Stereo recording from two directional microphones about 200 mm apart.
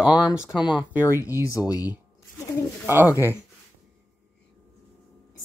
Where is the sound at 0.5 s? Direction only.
20° left (ahead or behind).